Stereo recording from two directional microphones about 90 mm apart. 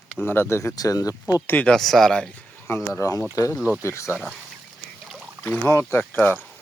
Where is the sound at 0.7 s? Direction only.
45° left (ahead or behind).